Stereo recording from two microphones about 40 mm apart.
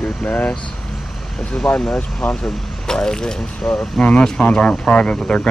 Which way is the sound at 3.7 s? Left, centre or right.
Left.